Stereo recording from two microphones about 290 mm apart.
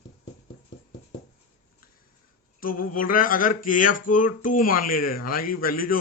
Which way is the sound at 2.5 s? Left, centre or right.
Left.